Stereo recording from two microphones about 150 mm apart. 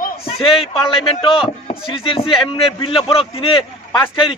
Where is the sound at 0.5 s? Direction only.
35° left (ahead or behind).